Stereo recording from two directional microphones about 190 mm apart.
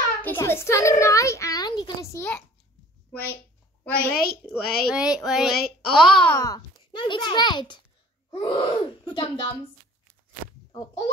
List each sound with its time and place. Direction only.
0.2 s a child's voice: 10° left (ahead or behind)
3.8 s a child's voice: 5° left (ahead or behind)
6.3 s a child's voice: 15° left (ahead or behind)